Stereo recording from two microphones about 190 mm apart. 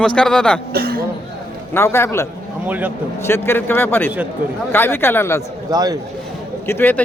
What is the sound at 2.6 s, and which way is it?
Speech, 10° right (ahead or behind).